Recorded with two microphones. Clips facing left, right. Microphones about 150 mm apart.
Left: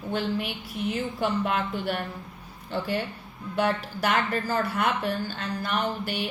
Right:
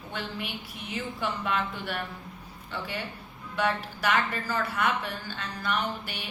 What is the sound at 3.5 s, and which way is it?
A woman's voice, 45° left (ahead or behind).